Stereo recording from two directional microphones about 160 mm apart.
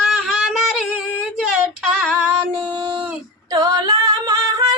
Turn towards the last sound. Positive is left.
turn(degrees=-25)  # may be behind; listen again after turning